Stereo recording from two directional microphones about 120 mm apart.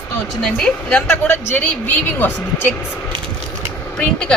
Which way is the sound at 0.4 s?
5° left (ahead or behind).